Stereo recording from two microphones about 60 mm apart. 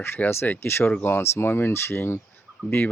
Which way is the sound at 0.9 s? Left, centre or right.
Left.